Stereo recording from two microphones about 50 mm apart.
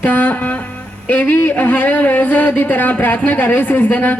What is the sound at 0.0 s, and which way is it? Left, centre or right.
Music, left.